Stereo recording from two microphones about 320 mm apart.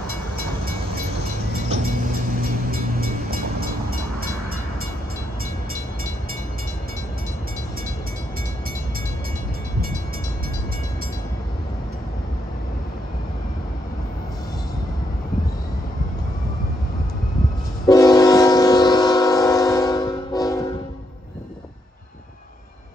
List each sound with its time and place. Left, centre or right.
1.7 s vehicle: right
17.8 s train: centre